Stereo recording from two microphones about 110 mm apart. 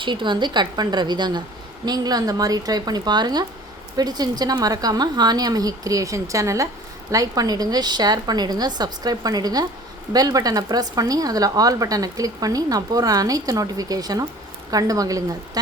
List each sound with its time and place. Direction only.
0.0 s speech: 45° right (ahead or behind)